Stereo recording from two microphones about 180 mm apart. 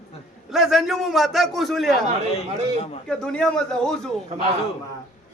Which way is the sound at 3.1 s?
5° left (ahead or behind).